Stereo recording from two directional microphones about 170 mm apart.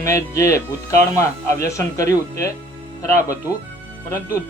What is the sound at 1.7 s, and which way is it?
Speech, 20° left (ahead or behind).